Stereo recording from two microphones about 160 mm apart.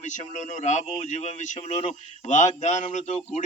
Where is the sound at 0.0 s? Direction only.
50° left (ahead or behind).